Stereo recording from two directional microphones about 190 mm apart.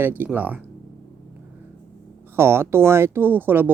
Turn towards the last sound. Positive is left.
turn(degrees=-10)  # may be behind; listen again after turning